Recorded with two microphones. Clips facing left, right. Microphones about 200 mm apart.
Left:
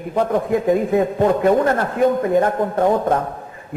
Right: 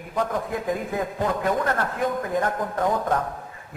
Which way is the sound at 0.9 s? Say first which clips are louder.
Left 9 dB; 25° left (ahead or behind).